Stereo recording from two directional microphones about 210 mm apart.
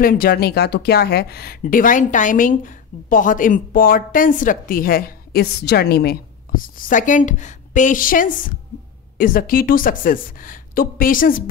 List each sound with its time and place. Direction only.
0.0 s speech: 45° left (ahead or behind)